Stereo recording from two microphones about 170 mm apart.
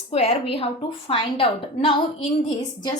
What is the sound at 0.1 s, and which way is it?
A woman's voice, 35° left (ahead or behind).